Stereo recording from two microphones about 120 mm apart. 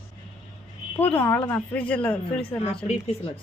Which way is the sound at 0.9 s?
15° left (ahead or behind).